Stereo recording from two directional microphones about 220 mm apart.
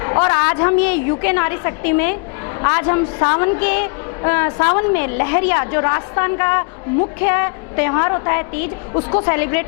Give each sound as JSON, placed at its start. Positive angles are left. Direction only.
{"t": 0.0, "sound": "a woman's voice", "side_deg": 20}
{"t": 9.3, "sound": "a woman's voice", "side_deg": 15}